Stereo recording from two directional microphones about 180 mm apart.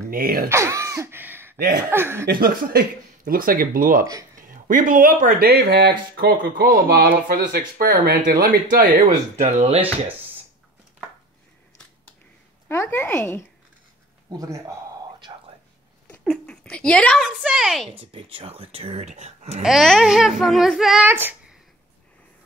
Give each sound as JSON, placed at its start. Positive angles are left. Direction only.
{"t": 0.1, "sound": "speech", "side_deg": -55}
{"t": 0.5, "sound": "throat clearing", "side_deg": -15}
{"t": 1.9, "sound": "speech", "side_deg": -15}
{"t": 2.2, "sound": "speech", "side_deg": -55}
{"t": 4.0, "sound": "speech", "side_deg": -20}
{"t": 4.4, "sound": "speech", "side_deg": -50}
{"t": 9.4, "sound": "speech", "side_deg": -35}
{"t": 12.6, "sound": "speech", "side_deg": 15}
{"t": 14.3, "sound": "a sound", "side_deg": -20}
{"t": 16.1, "sound": "speech", "side_deg": 5}
{"t": 17.9, "sound": "speech", "side_deg": -30}
{"t": 19.6, "sound": "a child's voice", "side_deg": 0}